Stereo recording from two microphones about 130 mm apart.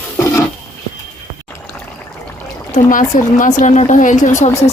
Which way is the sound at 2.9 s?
85° left.